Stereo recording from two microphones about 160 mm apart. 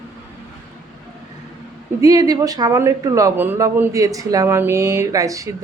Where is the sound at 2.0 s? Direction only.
20° right (ahead or behind).